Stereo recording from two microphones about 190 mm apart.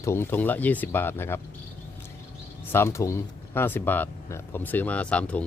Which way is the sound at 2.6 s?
10° left (ahead or behind).